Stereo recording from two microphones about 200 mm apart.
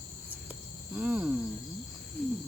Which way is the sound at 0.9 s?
5° right (ahead or behind).